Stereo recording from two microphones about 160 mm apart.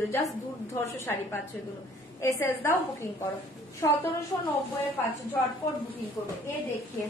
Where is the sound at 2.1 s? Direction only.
20° left (ahead or behind).